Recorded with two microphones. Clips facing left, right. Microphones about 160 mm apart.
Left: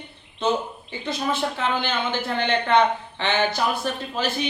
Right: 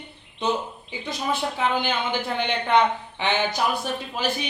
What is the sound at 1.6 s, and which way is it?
Speech, 15° right (ahead or behind).